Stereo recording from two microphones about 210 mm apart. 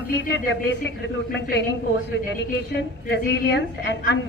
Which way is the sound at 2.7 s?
55° left (ahead or behind).